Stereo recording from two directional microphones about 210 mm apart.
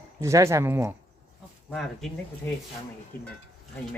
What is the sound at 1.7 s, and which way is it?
Speech, centre (ahead or behind).